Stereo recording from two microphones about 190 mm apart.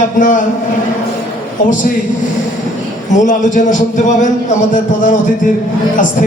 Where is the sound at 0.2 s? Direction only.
45° left (ahead or behind).